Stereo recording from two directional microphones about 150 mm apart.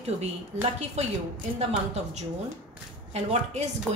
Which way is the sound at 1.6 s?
45° right (ahead or behind).